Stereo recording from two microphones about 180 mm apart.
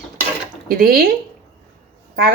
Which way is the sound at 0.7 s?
55° right (ahead or behind).